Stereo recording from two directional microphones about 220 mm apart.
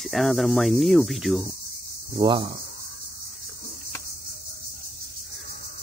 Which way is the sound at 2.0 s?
20° right (ahead or behind).